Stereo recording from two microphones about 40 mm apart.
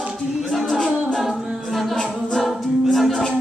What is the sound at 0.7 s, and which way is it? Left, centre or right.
Music, centre.